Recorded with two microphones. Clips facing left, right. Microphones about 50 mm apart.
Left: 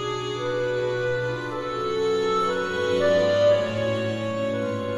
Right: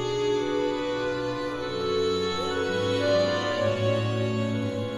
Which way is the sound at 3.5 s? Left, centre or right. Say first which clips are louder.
Left 4 dB; centre.